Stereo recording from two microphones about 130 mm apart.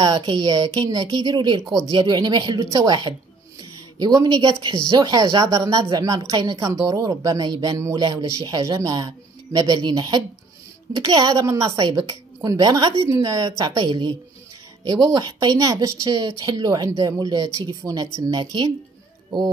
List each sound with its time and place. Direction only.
0.0 s speech: 35° right (ahead or behind)